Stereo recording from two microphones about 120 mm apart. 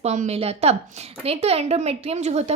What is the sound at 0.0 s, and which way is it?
A woman's voice, 70° right (ahead or behind).